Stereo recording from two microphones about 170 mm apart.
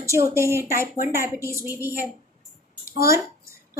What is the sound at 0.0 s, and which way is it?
A woman's voice, 15° right (ahead or behind).